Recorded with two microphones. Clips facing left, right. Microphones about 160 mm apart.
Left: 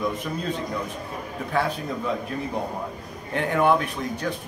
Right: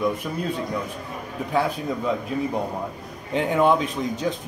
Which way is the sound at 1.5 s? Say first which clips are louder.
Right 2 dB; 15° right (ahead or behind).